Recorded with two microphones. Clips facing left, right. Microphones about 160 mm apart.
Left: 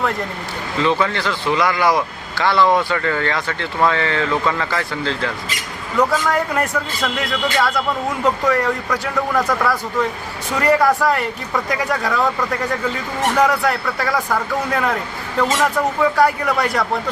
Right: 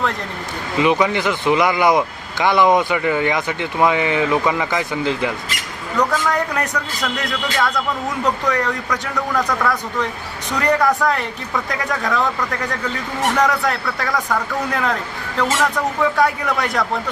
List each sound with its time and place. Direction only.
0.8 s speech: 15° right (ahead or behind)
6.0 s speech: centre (ahead or behind)
16.1 s speech: centre (ahead or behind)